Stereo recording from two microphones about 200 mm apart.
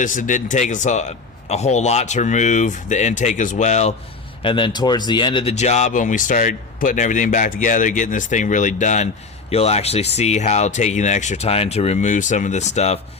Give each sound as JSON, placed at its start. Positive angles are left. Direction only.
{"t": 0.0, "sound": "speech", "side_deg": 40}